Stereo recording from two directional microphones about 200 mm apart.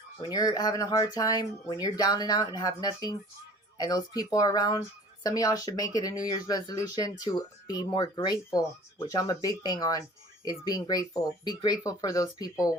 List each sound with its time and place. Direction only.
0.3 s speech: 20° left (ahead or behind)